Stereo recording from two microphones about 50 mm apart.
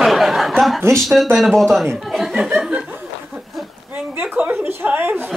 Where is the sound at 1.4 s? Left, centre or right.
Centre.